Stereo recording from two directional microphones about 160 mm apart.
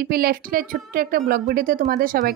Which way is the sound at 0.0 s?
70° right (ahead or behind).